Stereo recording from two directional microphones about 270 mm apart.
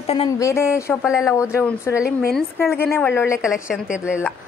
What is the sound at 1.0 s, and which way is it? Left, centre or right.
Speech, centre.